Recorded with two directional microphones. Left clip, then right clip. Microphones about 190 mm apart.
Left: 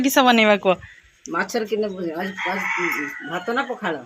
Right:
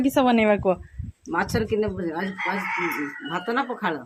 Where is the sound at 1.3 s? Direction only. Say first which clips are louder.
Left 1 dB; 30° right (ahead or behind).